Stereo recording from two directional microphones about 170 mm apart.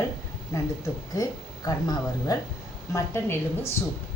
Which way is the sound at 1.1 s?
20° left (ahead or behind).